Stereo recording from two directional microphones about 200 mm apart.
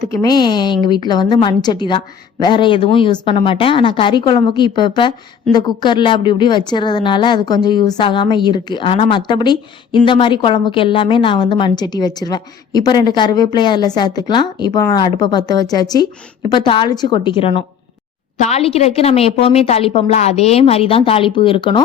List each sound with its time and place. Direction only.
0.0 s a woman's voice: 15° left (ahead or behind)